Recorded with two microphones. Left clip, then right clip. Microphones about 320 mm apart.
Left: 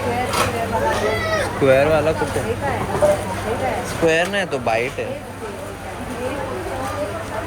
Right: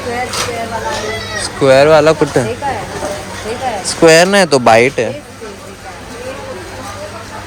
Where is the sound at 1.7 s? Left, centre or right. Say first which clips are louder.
Right 9 dB; centre.